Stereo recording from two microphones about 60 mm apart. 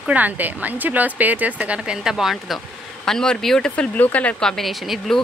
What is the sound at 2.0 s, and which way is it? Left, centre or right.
Speech, centre.